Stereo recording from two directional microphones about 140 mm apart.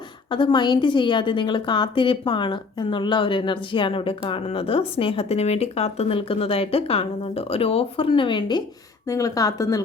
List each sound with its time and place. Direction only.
0.3 s a woman's voice: 35° left (ahead or behind)